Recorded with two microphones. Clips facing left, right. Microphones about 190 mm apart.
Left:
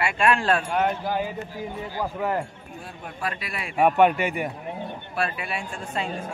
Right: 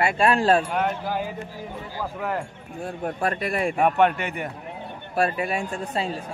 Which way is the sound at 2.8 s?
45° right (ahead or behind).